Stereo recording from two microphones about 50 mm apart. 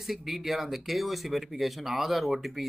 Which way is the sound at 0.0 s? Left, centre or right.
Centre.